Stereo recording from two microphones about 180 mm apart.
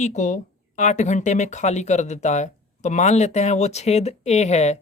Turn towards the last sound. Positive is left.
turn(degrees=40)  # may be behind; listen again after turning